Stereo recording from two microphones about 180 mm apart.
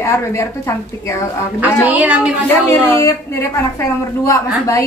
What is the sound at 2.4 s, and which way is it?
A woman's voice, 15° left (ahead or behind).